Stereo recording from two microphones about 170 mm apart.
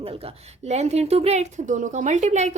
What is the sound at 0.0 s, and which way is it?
A woman's voice, 35° right (ahead or behind).